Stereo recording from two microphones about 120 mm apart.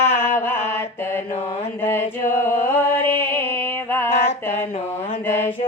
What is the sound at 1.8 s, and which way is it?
Music, 20° left (ahead or behind).